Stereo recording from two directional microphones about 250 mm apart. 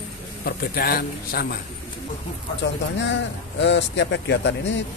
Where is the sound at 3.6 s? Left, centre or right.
Left.